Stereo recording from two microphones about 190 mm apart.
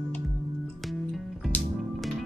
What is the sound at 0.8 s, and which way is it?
Music, centre (ahead or behind).